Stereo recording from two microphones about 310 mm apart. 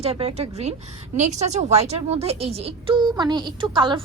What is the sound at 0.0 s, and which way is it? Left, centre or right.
A woman's voice, centre.